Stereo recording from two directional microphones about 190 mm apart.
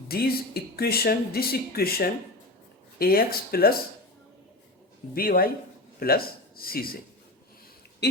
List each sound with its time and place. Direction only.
0.1 s speech: 55° left (ahead or behind)
5.1 s speech: 50° left (ahead or behind)